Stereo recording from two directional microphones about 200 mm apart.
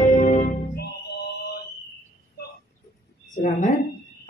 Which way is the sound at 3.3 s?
40° left (ahead or behind).